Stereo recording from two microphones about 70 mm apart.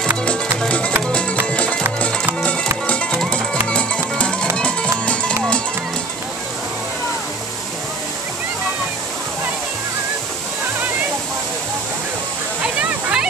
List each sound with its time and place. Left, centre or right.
0.2 s music: centre
2.9 s music: centre
12.6 s waterfall: centre